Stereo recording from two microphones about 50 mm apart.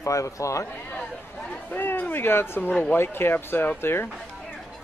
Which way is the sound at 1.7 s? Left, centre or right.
Left.